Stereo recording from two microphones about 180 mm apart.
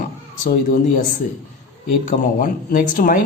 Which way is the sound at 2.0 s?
45° left (ahead or behind).